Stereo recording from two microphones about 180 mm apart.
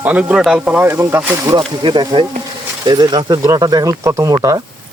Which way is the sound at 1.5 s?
25° right (ahead or behind).